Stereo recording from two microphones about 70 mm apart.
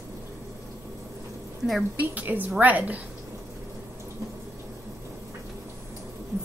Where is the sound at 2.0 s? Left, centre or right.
Right.